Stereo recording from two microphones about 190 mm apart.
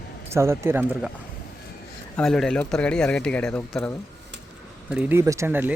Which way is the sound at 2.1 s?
5° left (ahead or behind).